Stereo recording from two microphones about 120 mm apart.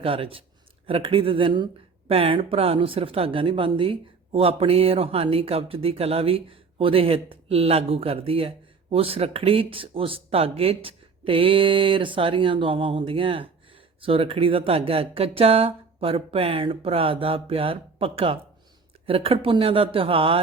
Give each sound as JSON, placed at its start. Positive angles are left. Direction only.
{"t": 0.0, "sound": "speech", "side_deg": -50}
{"t": 2.0, "sound": "speech", "side_deg": -55}